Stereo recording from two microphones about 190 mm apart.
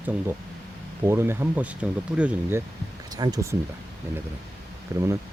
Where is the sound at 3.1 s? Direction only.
20° right (ahead or behind).